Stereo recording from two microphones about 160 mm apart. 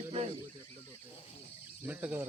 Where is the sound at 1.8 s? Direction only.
10° right (ahead or behind).